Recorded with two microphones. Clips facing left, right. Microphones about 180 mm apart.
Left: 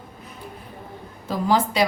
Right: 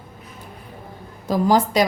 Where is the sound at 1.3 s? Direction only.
45° right (ahead or behind).